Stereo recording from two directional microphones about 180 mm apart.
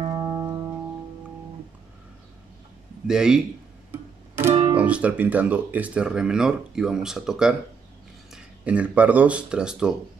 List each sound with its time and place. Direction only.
0.0 s music: 20° right (ahead or behind)
3.1 s speech: 5° right (ahead or behind)
4.7 s speech: 5° right (ahead or behind)